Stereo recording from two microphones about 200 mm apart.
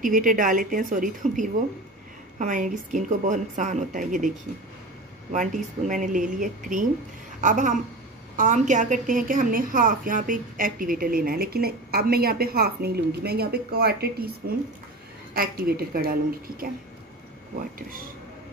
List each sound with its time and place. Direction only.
0.0 s a woman's voice: 40° right (ahead or behind)
5.3 s a woman's voice: 40° right (ahead or behind)
15.3 s a woman's voice: 45° right (ahead or behind)